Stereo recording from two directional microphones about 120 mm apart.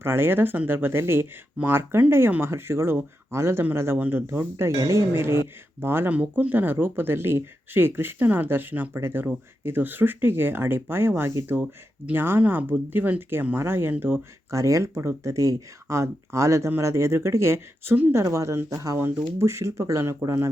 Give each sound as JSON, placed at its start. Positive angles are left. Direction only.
{"t": 0.0, "sound": "speech", "side_deg": -20}